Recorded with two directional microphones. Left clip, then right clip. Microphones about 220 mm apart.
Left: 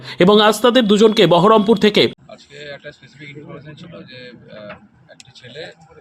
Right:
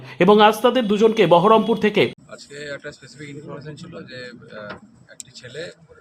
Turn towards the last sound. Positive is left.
turn(degrees=-5)  # may be behind; listen again after turning